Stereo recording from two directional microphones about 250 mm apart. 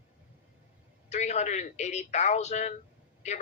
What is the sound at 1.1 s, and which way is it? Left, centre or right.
A man's voice, left.